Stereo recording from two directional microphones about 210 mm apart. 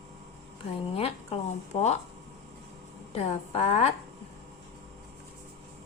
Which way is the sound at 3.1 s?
30° left (ahead or behind).